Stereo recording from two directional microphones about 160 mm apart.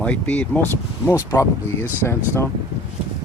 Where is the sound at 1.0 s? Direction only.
20° left (ahead or behind).